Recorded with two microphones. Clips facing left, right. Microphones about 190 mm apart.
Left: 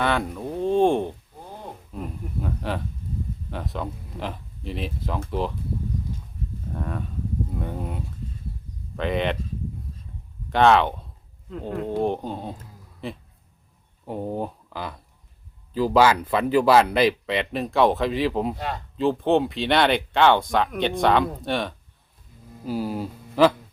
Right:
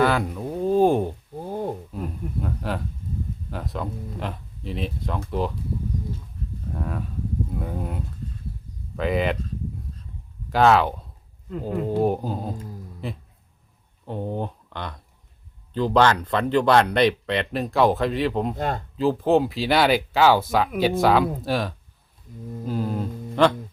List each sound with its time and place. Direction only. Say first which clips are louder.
0.0 s speech: right 3 dB; centre (ahead or behind)
1.5 s a sound: right 11 dB; 45° right (ahead or behind)
1.9 s speech: right 2 dB; centre (ahead or behind)
6.7 s speech: even; centre (ahead or behind)
10.5 s speech: even; centre (ahead or behind)
18.5 s speech: right 4 dB; 50° right (ahead or behind)
18.9 s speech: right 1 dB; centre (ahead or behind)